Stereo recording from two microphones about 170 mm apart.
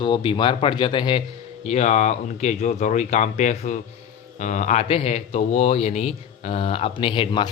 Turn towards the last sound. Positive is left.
turn(degrees=30)  # may be behind; listen again after turning